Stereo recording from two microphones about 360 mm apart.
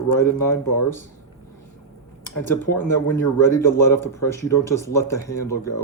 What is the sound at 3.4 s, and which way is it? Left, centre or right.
Speech, centre.